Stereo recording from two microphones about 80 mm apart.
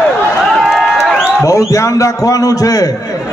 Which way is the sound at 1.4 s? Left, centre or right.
Left.